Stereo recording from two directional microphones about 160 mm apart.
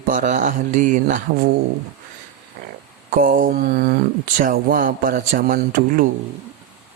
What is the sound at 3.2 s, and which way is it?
Speech, 60° right (ahead or behind).